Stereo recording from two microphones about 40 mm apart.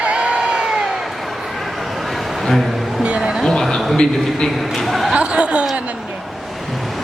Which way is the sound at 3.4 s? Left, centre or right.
Centre.